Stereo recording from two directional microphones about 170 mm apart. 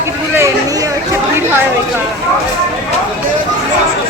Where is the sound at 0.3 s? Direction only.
20° right (ahead or behind).